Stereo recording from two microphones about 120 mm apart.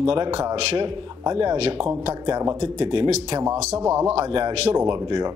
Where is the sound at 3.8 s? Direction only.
20° right (ahead or behind).